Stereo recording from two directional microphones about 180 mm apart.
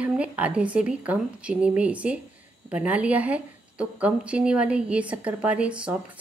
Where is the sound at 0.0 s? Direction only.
5° right (ahead or behind).